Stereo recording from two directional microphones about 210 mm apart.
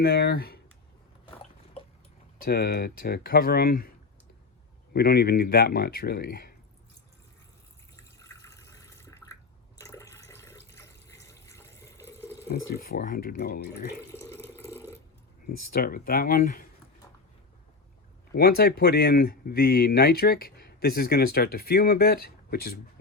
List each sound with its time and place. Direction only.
0.0 s speech: 50° left (ahead or behind)
2.4 s speech: 50° left (ahead or behind)
4.9 s speech: 50° left (ahead or behind)
8.2 s water: 15° left (ahead or behind)
12.5 s speech: 45° left (ahead or behind)
14.1 s water tap: 15° left (ahead or behind)
14.7 s a sound: 15° left (ahead or behind)
15.4 s speech: 45° left (ahead or behind)
18.3 s speech: 45° left (ahead or behind)